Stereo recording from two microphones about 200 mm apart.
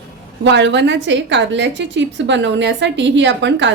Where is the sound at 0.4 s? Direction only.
65° right (ahead or behind).